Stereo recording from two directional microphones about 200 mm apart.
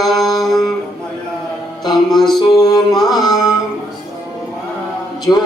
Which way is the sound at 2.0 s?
Centre (ahead or behind).